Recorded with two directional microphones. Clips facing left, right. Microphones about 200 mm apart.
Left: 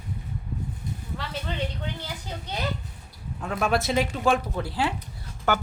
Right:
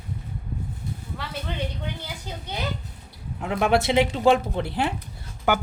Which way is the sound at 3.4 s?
20° right (ahead or behind).